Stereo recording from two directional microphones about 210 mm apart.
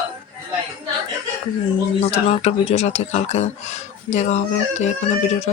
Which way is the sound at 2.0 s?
30° left (ahead or behind).